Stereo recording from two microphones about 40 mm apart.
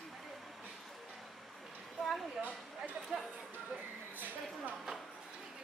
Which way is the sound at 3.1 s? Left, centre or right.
Centre.